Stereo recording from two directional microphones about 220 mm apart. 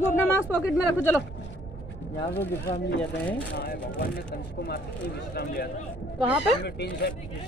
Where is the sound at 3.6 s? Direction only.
45° left (ahead or behind).